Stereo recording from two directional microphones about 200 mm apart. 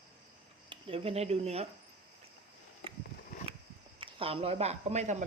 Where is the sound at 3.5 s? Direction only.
30° right (ahead or behind).